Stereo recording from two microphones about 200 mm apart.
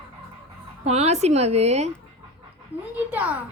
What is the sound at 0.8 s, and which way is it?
Speech, 35° right (ahead or behind).